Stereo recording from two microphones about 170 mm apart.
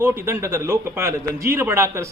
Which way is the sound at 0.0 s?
15° right (ahead or behind).